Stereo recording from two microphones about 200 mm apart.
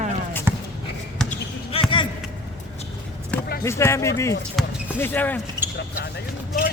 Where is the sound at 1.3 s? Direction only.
25° left (ahead or behind).